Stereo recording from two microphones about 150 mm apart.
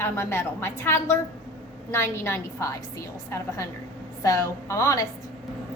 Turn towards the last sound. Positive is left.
turn(degrees=20)  # may be behind; listen again after turning